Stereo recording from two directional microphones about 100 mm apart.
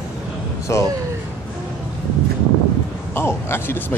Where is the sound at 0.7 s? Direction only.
30° left (ahead or behind).